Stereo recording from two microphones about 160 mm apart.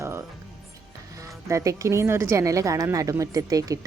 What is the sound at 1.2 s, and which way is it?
A woman's voice, 20° right (ahead or behind).